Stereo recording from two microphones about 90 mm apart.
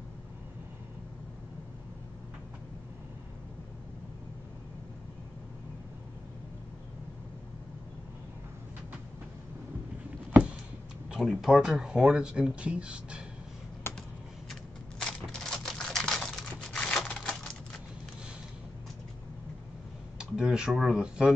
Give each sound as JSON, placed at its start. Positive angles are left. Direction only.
{"t": 11.1, "sound": "speech", "side_deg": -5}
{"t": 13.9, "sound": "computer keyboard", "side_deg": 25}
{"t": 14.5, "sound": "typewriter", "side_deg": 0}
{"t": 20.2, "sound": "speech", "side_deg": -10}